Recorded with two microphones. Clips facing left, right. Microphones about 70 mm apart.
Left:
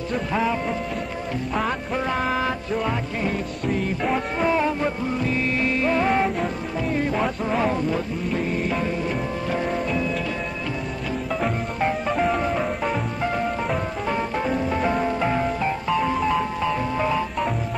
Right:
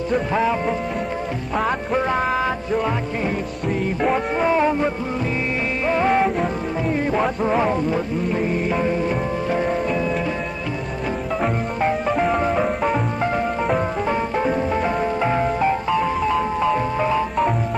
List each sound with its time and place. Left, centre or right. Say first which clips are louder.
0.3 s music: even; centre
2.1 s a sound: right 3 dB; centre
4.5 s music: right 3 dB; centre
6.0 s music: right 3 dB; centre
9.5 s music: right 3 dB; centre
11.4 s music: right 3 dB; centre
14.0 s music: right 3 dB; centre
15.9 s music: right 2 dB; centre